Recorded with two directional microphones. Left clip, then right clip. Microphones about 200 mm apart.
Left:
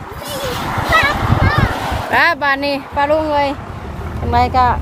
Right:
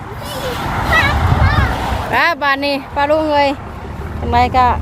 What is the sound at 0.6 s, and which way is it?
Vehicle, centre (ahead or behind).